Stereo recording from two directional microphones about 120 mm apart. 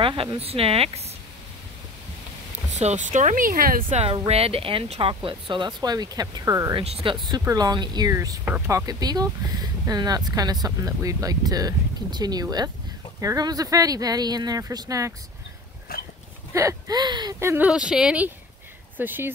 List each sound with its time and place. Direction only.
0.0 s speech: 45° right (ahead or behind)
2.8 s speech: 80° right
3.9 s speech: 60° right (ahead or behind); by 6.7 s 25° right (ahead or behind)
6.7 s speech: 55° right (ahead or behind); by 15.1 s 30° right (ahead or behind)
16.5 s speech: 25° right (ahead or behind)
17.4 s speech: 20° right (ahead or behind)
17.6 s speech: 5° right (ahead or behind)